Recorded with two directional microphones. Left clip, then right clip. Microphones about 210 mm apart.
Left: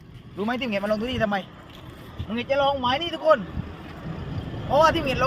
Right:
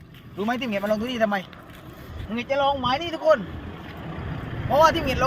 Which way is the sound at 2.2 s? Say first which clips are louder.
Even; 5° left (ahead or behind).